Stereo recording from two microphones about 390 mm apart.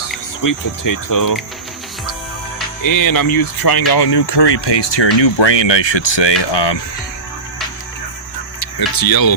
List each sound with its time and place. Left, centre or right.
0.4 s speech: left
2.8 s speech: left
8.6 s speech: left